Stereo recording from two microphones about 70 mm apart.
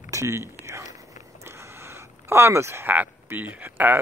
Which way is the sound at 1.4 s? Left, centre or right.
Right.